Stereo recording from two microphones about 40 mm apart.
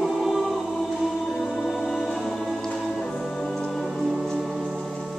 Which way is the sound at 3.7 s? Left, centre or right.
Centre.